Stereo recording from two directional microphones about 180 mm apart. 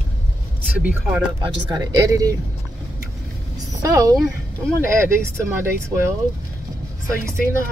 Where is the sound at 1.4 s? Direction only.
20° right (ahead or behind).